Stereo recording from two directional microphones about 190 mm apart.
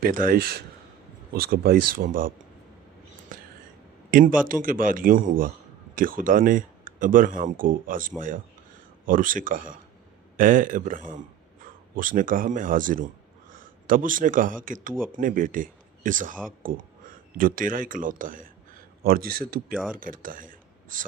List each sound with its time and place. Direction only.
0.0 s speech: 45° right (ahead or behind)
3.3 s whispering: 45° right (ahead or behind)
4.1 s speech: 45° right (ahead or behind)